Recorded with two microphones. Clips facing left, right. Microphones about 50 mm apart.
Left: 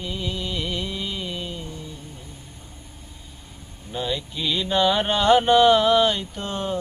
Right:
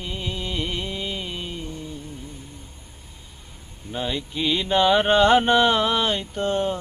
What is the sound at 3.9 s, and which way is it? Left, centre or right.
Speech, right.